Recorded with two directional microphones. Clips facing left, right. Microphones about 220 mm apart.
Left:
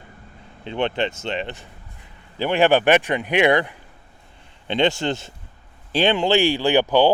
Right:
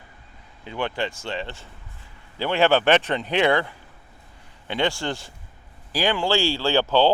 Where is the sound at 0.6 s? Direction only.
25° left (ahead or behind).